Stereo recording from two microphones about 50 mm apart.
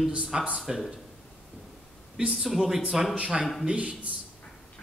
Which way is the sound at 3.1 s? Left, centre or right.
Centre.